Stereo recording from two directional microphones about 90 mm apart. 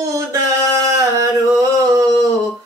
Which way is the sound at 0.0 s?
40° right (ahead or behind).